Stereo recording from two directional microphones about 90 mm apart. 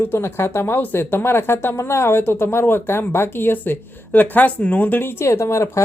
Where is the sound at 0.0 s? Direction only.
25° left (ahead or behind).